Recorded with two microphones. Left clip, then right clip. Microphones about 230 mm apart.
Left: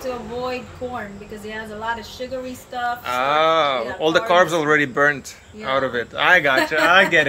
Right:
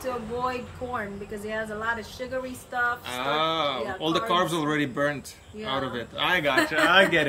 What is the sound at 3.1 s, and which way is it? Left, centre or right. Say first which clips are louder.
Speech: left 9 dB; centre.